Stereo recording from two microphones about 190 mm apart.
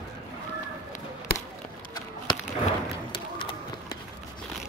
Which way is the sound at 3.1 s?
25° left (ahead or behind).